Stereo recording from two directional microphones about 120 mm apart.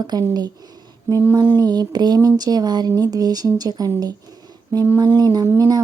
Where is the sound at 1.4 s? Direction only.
35° right (ahead or behind).